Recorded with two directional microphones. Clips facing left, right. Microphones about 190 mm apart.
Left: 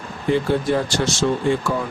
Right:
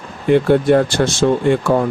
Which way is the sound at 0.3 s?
60° right (ahead or behind).